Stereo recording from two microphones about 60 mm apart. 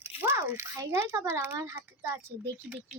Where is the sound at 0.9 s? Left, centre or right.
Right.